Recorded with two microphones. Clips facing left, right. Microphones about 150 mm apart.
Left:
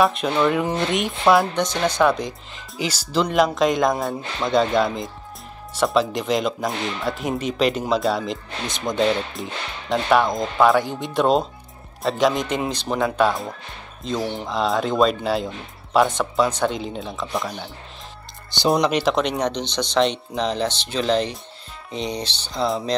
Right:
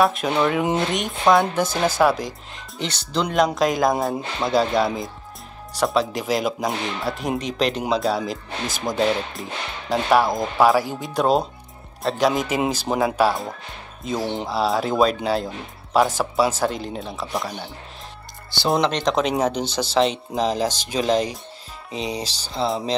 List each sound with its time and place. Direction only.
0.0 s speech: centre (ahead or behind)
14.2 s speech: 20° right (ahead or behind)
14.5 s speech: 5° right (ahead or behind)
18.8 s speech: 10° left (ahead or behind)
19.1 s speech: 5° right (ahead or behind)